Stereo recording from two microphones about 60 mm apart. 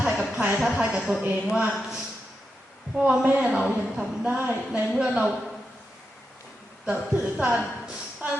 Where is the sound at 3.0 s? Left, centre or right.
Centre.